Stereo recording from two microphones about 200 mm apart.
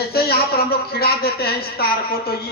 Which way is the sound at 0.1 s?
50° left (ahead or behind).